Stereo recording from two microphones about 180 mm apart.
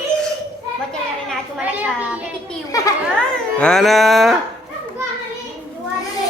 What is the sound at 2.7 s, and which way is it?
Children playing, 20° left (ahead or behind).